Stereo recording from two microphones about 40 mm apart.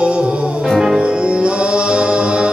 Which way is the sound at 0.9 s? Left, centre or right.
Right.